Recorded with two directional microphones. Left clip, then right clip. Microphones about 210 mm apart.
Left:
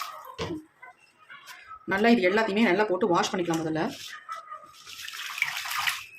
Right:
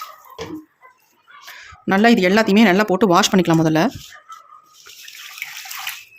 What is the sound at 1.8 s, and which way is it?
Speech, 50° right (ahead or behind).